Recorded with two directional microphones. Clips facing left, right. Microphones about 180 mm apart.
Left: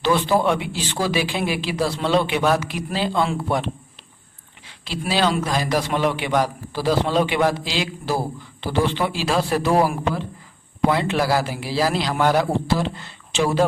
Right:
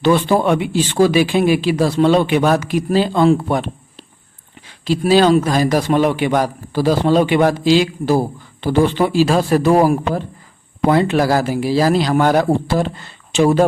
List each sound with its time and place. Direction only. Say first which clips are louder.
0.0 s a man's voice: right 5 dB; 50° right (ahead or behind)